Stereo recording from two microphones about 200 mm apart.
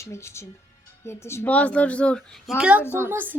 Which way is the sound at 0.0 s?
15° left (ahead or behind).